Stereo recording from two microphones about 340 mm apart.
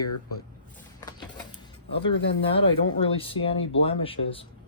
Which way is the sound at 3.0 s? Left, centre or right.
Centre.